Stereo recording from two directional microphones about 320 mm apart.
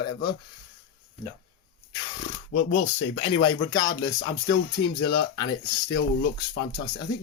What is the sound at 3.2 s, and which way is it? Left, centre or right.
Speech, centre.